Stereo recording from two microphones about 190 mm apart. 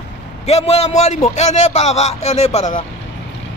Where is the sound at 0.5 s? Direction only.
35° left (ahead or behind).